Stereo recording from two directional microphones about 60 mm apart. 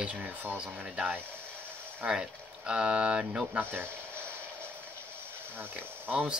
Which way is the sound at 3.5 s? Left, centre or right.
Right.